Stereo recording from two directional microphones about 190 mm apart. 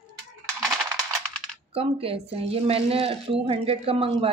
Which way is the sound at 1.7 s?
30° right (ahead or behind).